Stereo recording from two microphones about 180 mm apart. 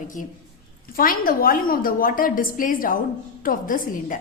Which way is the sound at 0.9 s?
55° left (ahead or behind).